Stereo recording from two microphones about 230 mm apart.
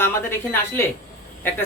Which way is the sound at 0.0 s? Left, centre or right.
Centre.